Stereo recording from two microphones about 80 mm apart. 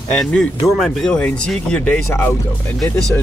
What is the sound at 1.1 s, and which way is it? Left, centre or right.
Speech, centre.